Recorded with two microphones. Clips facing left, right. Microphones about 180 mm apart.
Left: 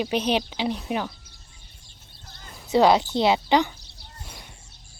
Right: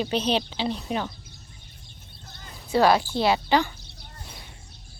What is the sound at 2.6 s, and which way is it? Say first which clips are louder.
Speech: left 2 dB; 20° left (ahead or behind).